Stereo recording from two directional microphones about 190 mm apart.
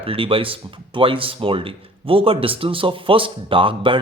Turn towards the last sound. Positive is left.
turn(degrees=-25)  # may be behind; listen again after turning